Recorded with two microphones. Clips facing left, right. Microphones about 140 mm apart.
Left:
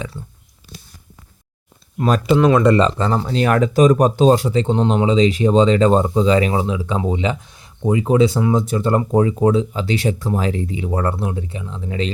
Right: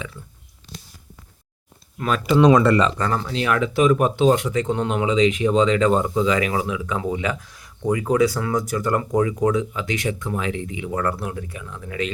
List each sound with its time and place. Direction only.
0.0 s speech: 35° left (ahead or behind)
2.0 s speech: 40° left (ahead or behind)
2.6 s speech: 25° left (ahead or behind)
3.3 s speech: 40° left (ahead or behind)